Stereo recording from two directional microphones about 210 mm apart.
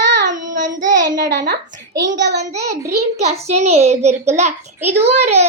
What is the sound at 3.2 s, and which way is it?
A child's voice, 30° right (ahead or behind).